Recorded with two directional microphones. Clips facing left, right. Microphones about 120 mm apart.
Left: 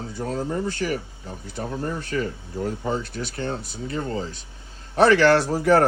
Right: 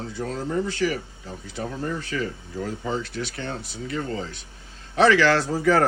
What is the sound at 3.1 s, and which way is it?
Speech, 40° left (ahead or behind).